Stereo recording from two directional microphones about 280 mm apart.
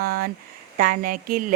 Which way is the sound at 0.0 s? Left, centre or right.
Right.